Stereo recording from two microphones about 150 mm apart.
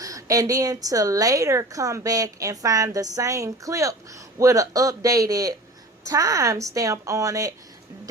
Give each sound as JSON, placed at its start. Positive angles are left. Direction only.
{"t": 0.0, "sound": "a woman's voice", "side_deg": -20}